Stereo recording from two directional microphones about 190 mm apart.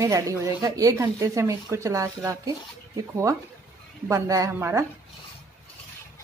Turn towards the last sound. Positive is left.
turn(degrees=-10)  # may be behind; listen again after turning